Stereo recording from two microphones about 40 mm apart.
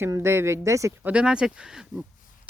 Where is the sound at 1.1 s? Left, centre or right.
Right.